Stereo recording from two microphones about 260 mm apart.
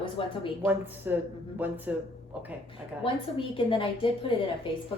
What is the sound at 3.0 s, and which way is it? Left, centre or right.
A woman's voice, centre.